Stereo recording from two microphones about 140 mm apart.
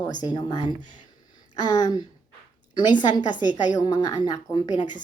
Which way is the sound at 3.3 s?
65° left (ahead or behind).